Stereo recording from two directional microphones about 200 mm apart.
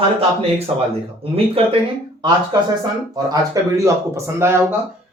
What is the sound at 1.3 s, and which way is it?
Speech, 30° right (ahead or behind).